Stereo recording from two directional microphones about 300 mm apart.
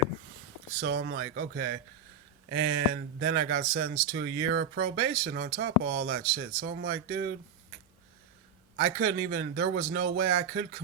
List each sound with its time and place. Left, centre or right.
0.8 s speech: right
8.7 s speech: right